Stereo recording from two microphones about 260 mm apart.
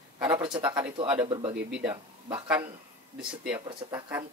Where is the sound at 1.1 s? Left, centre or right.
Centre.